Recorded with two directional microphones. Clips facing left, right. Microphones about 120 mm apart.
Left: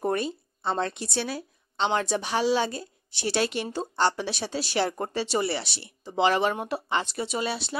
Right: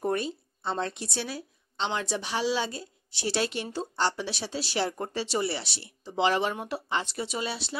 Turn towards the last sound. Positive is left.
turn(degrees=55)  # may be behind; listen again after turning